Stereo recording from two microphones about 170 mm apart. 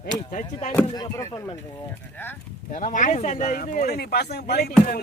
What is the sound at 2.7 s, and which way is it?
Speech, 50° left (ahead or behind).